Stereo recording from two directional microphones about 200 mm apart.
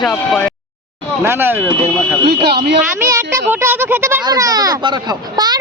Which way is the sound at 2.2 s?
55° right (ahead or behind).